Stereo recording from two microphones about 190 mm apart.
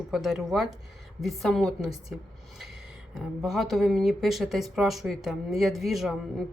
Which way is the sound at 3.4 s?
Centre (ahead or behind).